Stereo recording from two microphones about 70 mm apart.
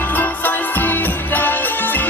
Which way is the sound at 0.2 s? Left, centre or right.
Left.